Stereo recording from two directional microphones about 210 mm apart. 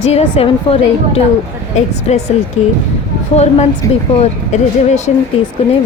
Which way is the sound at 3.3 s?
30° left (ahead or behind).